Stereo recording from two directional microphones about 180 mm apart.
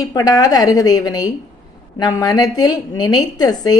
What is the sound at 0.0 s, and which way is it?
A woman's voice, 20° left (ahead or behind).